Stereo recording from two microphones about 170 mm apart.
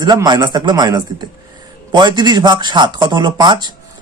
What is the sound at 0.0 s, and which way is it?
Speech, 25° right (ahead or behind).